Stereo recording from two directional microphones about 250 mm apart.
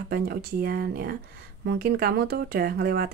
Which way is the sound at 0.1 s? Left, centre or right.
Right.